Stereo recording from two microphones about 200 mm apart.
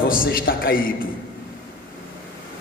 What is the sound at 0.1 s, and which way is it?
Speech, 45° left (ahead or behind).